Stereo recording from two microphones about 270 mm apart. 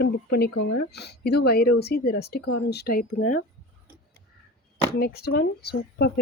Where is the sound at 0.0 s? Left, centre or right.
Left.